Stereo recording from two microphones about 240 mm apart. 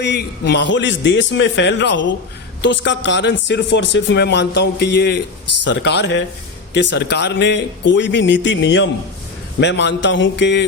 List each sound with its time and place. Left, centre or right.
0.0 s a man's voice: left